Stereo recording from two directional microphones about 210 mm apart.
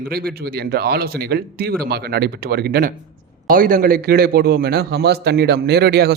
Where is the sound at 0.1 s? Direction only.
45° right (ahead or behind).